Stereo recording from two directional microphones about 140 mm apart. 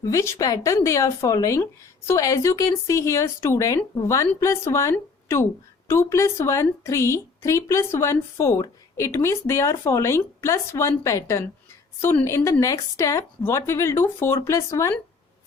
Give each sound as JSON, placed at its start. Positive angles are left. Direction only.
{"t": 0.0, "sound": "speech", "side_deg": 20}